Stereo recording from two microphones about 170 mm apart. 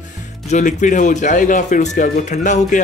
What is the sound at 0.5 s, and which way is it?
Speech, 45° left (ahead or behind).